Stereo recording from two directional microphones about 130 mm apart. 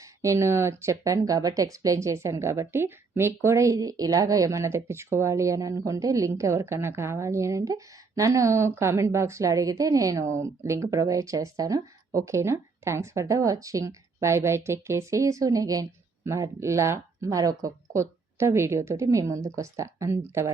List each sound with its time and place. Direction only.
0.2 s speech: 20° right (ahead or behind)